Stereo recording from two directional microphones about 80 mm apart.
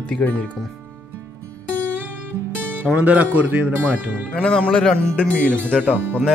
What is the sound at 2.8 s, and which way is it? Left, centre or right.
Speech, centre.